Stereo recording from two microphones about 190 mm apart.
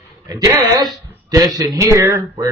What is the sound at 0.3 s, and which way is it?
A man's voice, 20° right (ahead or behind).